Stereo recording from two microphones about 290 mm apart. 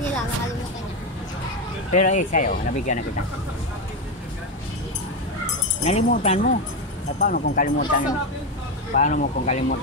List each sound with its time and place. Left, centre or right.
1.9 s speech: left
5.9 s speech: left